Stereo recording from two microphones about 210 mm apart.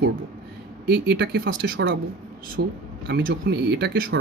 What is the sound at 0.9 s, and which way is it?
Speech, 50° right (ahead or behind).